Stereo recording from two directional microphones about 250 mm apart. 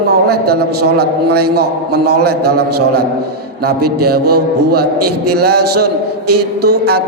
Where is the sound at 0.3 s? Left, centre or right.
Right.